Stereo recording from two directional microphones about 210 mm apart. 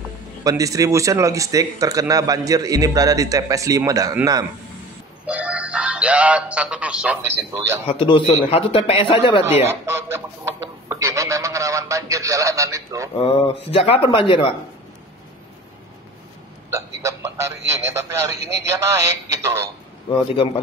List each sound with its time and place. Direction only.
0.4 s speech: 15° right (ahead or behind)
7.8 s a man's voice: 25° left (ahead or behind)
9.7 s speech: 10° right (ahead or behind)
10.9 s telephone: 15° right (ahead or behind)
13.2 s a man's voice: 25° left (ahead or behind)
16.7 s speech: 15° right (ahead or behind)
20.1 s a man's voice: 25° left (ahead or behind)